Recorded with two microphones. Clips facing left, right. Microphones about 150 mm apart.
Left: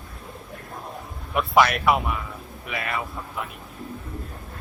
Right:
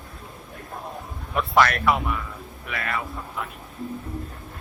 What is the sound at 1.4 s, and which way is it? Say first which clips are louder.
Speech: left 1 dB; 10° left (ahead or behind).